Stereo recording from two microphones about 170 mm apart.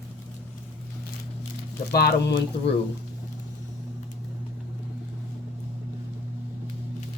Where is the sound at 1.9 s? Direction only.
75° left (ahead or behind).